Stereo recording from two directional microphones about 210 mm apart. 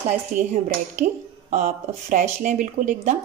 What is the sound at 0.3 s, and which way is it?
A woman's voice, 35° right (ahead or behind).